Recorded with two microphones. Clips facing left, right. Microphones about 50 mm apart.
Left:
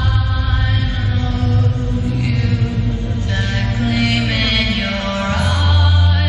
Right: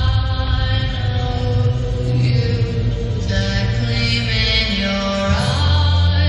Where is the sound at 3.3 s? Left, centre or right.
Centre.